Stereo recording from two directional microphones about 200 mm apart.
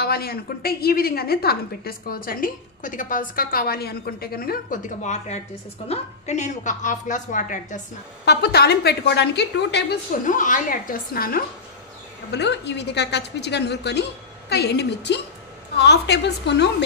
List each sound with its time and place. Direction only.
0.0 s a woman's voice: 50° left (ahead or behind)
8.3 s a woman's voice: 55° left (ahead or behind)
10.2 s a woman's voice: 40° left (ahead or behind)
12.3 s a woman's voice: 60° left (ahead or behind)